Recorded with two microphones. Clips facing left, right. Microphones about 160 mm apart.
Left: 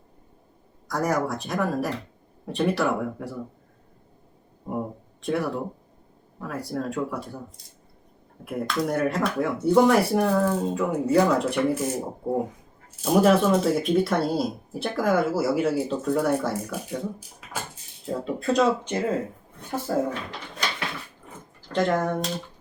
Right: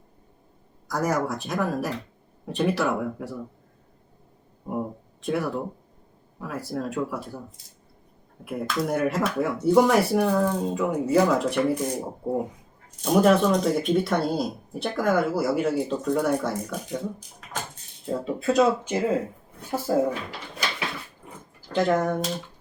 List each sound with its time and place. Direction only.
0.9 s speech: centre (ahead or behind)
4.6 s a sound: centre (ahead or behind)
6.4 s speech: centre (ahead or behind)
19.9 s speech: 20° right (ahead or behind)
21.7 s speech: centre (ahead or behind)